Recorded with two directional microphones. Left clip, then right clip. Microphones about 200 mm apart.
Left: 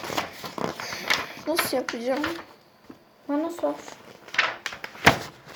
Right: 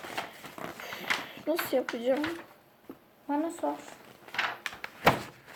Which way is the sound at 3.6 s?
35° left (ahead or behind).